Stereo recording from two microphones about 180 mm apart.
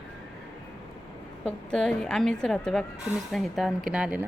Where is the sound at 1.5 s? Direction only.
5° left (ahead or behind).